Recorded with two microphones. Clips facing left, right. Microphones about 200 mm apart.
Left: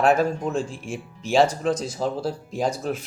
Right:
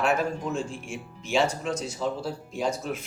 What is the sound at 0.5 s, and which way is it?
Speech, 35° left (ahead or behind).